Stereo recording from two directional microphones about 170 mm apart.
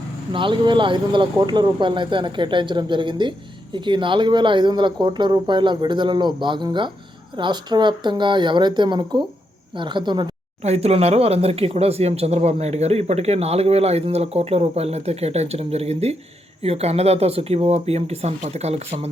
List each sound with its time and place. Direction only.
0.3 s speech: 30° right (ahead or behind)
10.6 s speech: 40° right (ahead or behind)